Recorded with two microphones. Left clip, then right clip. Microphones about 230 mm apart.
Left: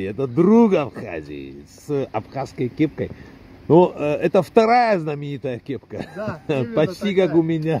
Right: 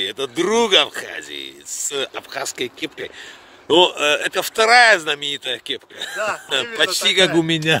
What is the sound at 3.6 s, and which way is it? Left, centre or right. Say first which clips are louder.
Speech: right 1 dB; centre.